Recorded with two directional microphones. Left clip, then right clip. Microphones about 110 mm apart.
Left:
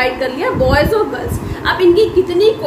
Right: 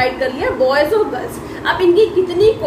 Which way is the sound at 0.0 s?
35° left (ahead or behind).